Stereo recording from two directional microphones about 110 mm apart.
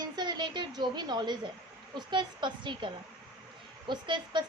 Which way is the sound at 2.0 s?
45° right (ahead or behind).